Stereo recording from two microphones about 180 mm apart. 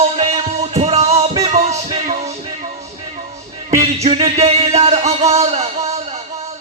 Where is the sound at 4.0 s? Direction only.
35° right (ahead or behind).